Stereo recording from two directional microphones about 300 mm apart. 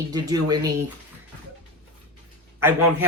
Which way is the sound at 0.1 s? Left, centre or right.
Centre.